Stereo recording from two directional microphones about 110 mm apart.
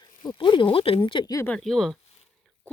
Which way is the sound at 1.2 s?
30° left (ahead or behind).